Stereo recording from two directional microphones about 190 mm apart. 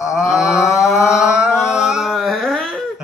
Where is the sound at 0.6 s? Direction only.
15° left (ahead or behind).